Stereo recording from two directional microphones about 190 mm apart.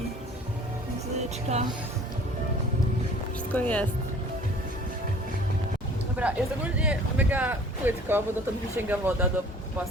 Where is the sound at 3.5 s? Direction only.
5° left (ahead or behind).